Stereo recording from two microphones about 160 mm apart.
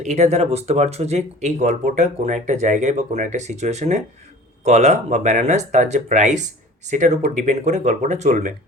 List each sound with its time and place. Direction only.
0.0 s speech: 45° right (ahead or behind)